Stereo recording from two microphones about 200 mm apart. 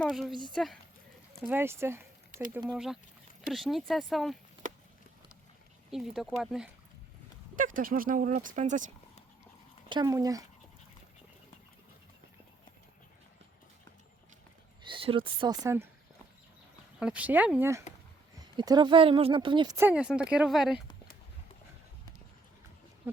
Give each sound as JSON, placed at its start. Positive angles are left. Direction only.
{"t": 0.0, "sound": "speech", "side_deg": 0}
{"t": 1.5, "sound": "speech", "side_deg": -10}
{"t": 5.9, "sound": "speech", "side_deg": 0}
{"t": 7.5, "sound": "speech", "side_deg": -40}
{"t": 9.9, "sound": "speech", "side_deg": -20}
{"t": 14.8, "sound": "speech", "side_deg": -25}
{"t": 17.0, "sound": "speech", "side_deg": -5}